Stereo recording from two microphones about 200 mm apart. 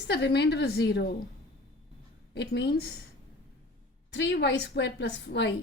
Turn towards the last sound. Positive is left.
turn(degrees=60)  # may be behind; listen again after turning